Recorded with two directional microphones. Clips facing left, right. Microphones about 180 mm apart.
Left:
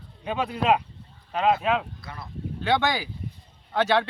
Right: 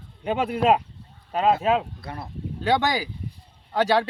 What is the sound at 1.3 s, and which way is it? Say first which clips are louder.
Speech: right 2 dB; 35° right (ahead or behind).